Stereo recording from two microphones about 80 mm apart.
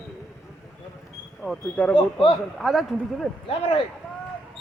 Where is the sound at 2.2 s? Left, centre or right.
Left.